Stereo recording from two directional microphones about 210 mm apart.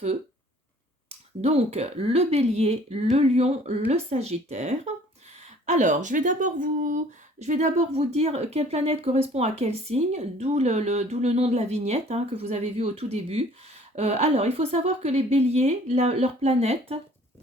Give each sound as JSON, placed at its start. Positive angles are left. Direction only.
{"t": 1.4, "sound": "speech", "side_deg": -30}